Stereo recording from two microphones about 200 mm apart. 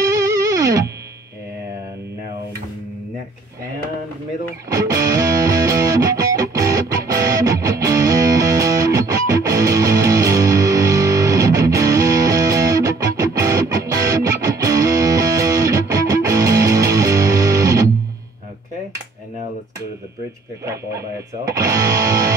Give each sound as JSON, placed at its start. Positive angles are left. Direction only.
{"t": 0.0, "sound": "music", "side_deg": -15}
{"t": 4.6, "sound": "music", "side_deg": -15}
{"t": 20.6, "sound": "a sound", "side_deg": -15}
{"t": 21.5, "sound": "music", "side_deg": -15}